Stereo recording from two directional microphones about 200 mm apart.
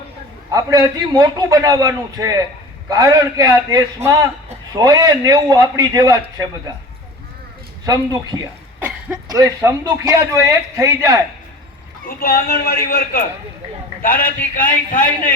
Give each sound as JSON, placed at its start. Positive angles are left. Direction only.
{"t": 0.5, "sound": "a man's voice", "side_deg": -15}
{"t": 7.9, "sound": "a man's voice", "side_deg": -20}
{"t": 12.0, "sound": "a man's voice", "side_deg": 50}